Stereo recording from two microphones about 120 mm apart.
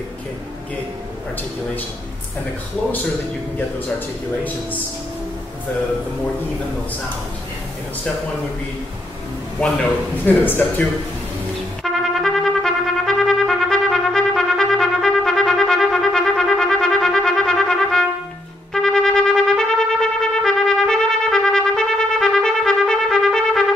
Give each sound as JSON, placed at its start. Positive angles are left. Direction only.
{"t": 10.2, "sound": "speech", "side_deg": 15}
{"t": 11.8, "sound": "trumpet", "side_deg": 0}